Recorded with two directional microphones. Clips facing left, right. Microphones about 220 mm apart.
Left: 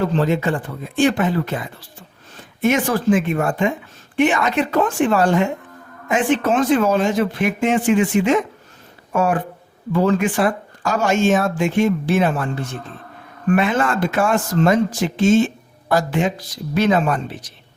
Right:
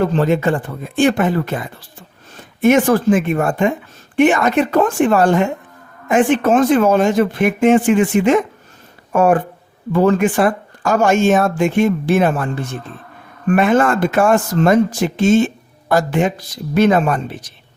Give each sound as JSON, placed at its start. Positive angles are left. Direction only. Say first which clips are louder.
{"t": 0.2, "sound": "speech", "louder": "right 3 dB", "side_deg": -50}
{"t": 13.6, "sound": "speech", "louder": "right 8 dB", "side_deg": -50}